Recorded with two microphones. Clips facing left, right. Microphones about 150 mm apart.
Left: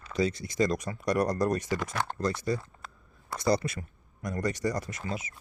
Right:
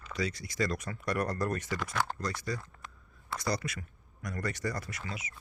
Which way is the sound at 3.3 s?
25° left (ahead or behind).